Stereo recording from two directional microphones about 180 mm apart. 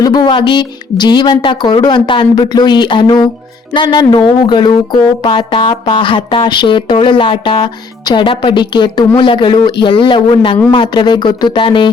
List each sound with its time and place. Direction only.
0.0 s speech: 20° left (ahead or behind)